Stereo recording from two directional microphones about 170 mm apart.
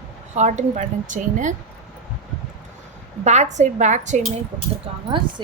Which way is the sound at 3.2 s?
40° right (ahead or behind).